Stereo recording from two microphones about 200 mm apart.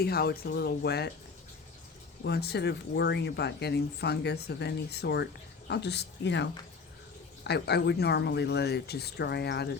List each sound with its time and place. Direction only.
0.0 s speech: 50° left (ahead or behind)
2.2 s speech: 55° left (ahead or behind)